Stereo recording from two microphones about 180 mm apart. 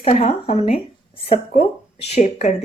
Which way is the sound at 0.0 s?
35° left (ahead or behind).